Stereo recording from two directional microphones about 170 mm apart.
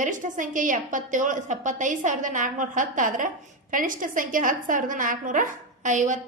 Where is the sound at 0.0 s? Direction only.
50° right (ahead or behind).